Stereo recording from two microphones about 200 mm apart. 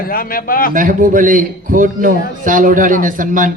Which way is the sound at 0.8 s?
40° right (ahead or behind).